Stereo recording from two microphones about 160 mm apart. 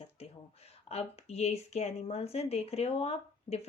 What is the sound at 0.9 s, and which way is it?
A woman's voice, 40° left (ahead or behind).